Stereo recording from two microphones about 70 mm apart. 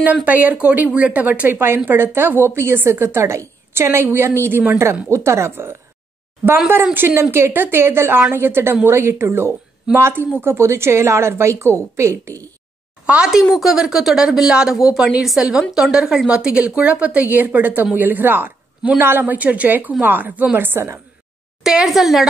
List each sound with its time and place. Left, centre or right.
0.0 s speech: right
1.5 s a woman's voice: right
13.0 s a woman's voice: centre; by 21.0 s right
21.6 s a woman's voice: centre